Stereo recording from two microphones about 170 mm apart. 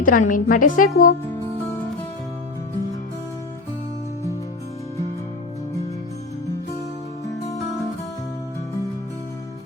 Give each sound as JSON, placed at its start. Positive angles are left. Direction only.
{"t": 0.0, "sound": "a woman's voice", "side_deg": 50}